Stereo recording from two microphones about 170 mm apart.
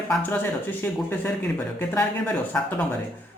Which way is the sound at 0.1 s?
10° left (ahead or behind).